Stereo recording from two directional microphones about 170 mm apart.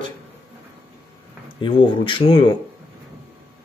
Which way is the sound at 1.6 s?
30° left (ahead or behind).